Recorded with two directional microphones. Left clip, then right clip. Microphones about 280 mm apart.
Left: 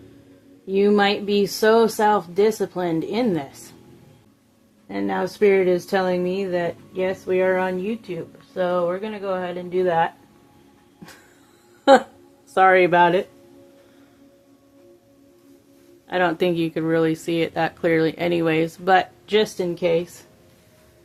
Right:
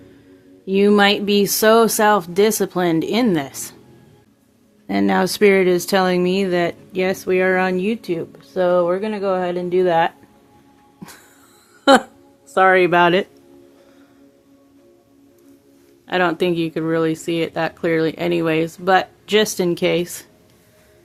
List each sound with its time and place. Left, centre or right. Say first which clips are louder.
0.7 s speech: right 4 dB; right
4.9 s speech: right 7 dB; right
11.0 s a sound: right 4 dB; centre
12.5 s speech: right 1 dB; centre
16.0 s speech: right 2 dB; right